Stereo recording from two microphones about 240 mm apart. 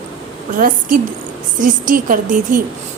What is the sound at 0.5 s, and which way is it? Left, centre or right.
A woman's voice, right.